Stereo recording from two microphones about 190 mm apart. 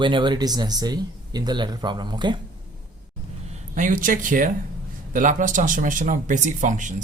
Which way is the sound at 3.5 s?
45° right (ahead or behind).